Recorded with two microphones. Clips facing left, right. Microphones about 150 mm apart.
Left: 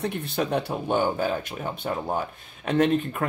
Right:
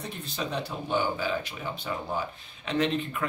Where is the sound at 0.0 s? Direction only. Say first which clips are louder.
Left 8 dB; 60° left (ahead or behind).